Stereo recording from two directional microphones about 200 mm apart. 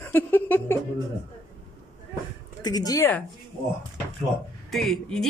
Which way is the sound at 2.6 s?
20° left (ahead or behind).